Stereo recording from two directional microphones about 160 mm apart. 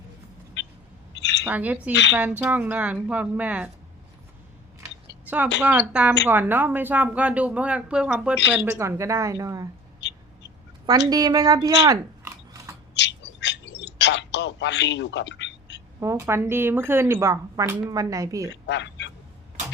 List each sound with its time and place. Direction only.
0.6 s a sound: 90° left
1.5 s speech: 10° right (ahead or behind)
1.9 s speech: 90° left
2.1 s speech: 10° right (ahead or behind)
5.6 s a woman's voice: 10° right (ahead or behind)
10.0 s owl: 90° left
10.8 s a woman's voice: 25° right (ahead or behind)
12.9 s a sound: 90° left
16.0 s speech: 15° right (ahead or behind)
18.5 s speech: 90° left